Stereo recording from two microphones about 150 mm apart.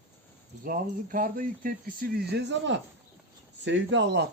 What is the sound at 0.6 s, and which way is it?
Speech, 70° right (ahead or behind).